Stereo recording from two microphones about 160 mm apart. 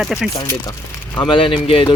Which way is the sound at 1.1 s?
30° left (ahead or behind).